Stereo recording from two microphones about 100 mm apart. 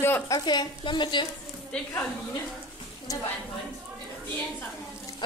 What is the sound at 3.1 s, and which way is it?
Speech, 35° left (ahead or behind).